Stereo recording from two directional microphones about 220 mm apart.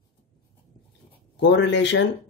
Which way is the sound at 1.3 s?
55° left (ahead or behind).